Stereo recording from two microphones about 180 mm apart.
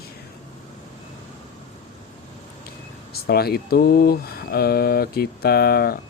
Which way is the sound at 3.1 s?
60° left (ahead or behind).